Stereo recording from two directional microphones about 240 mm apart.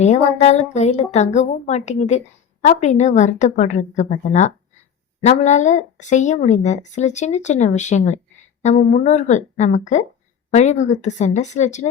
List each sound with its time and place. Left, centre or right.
0.0 s a woman's voice: left